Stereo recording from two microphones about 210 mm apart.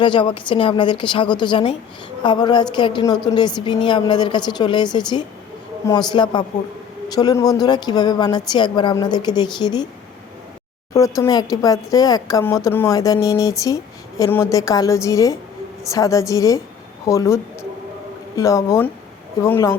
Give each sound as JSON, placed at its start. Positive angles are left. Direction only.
{"t": 0.0, "sound": "speech", "side_deg": 20}
{"t": 10.9, "sound": "speech", "side_deg": 15}